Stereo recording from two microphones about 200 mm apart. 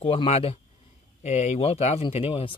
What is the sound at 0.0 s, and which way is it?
Speech, 30° left (ahead or behind).